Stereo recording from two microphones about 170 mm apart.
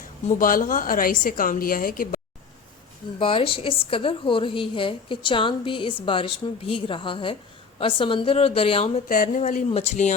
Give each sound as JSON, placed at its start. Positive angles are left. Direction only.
{"t": 0.3, "sound": "a woman's voice", "side_deg": 55}
{"t": 3.2, "sound": "a woman's voice", "side_deg": 30}
{"t": 9.0, "sound": "speech", "side_deg": 50}